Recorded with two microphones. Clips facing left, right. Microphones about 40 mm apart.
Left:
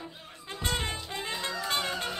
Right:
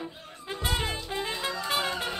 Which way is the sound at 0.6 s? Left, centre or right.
Centre.